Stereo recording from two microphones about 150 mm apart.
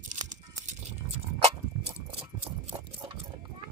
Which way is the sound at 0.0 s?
55° right (ahead or behind).